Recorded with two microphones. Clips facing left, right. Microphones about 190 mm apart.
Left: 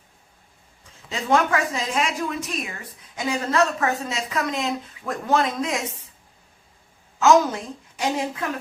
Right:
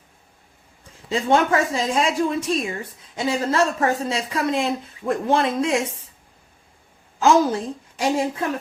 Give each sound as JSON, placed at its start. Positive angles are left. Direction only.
{"t": 1.1, "sound": "speech", "side_deg": -30}
{"t": 7.2, "sound": "a woman's voice", "side_deg": -30}